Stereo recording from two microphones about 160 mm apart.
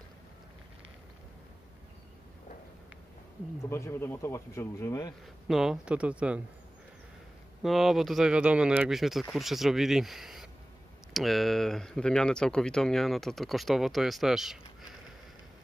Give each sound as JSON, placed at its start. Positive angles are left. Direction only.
{"t": 3.7, "sound": "speech", "side_deg": 15}
{"t": 5.5, "sound": "speech", "side_deg": -5}
{"t": 7.6, "sound": "speech", "side_deg": 0}